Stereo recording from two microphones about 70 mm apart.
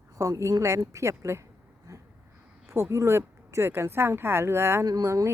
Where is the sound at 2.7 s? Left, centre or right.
Right.